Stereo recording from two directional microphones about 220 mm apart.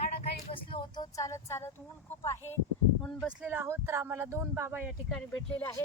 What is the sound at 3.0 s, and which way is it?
Speech, centre (ahead or behind).